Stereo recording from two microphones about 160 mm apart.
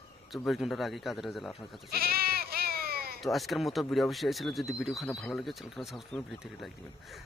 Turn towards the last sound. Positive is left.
turn(degrees=0)  # may be behind; listen again after turning